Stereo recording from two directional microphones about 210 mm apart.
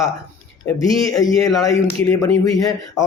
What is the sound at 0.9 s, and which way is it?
Speech, 15° left (ahead or behind).